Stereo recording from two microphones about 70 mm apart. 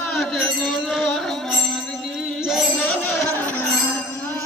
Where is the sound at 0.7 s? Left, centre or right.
Centre.